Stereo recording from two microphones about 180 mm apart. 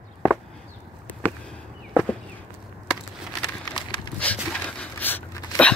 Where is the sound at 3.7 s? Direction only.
25° left (ahead or behind).